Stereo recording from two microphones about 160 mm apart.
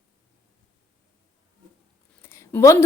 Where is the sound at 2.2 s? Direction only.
15° left (ahead or behind).